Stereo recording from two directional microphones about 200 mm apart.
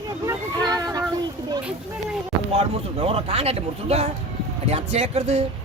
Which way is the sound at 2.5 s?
30° right (ahead or behind).